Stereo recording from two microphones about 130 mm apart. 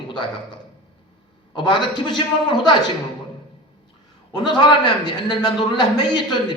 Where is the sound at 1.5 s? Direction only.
35° left (ahead or behind).